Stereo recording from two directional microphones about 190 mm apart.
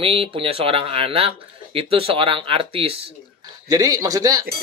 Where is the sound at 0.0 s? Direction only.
30° right (ahead or behind).